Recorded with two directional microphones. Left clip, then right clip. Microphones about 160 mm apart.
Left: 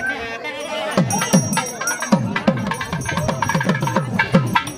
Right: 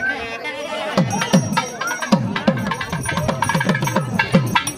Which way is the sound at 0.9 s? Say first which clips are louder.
Even; centre (ahead or behind).